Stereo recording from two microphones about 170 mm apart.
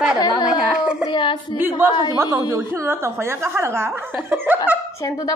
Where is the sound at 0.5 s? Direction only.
5° right (ahead or behind).